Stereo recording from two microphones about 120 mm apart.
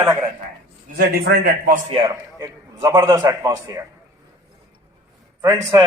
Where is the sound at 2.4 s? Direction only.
35° right (ahead or behind).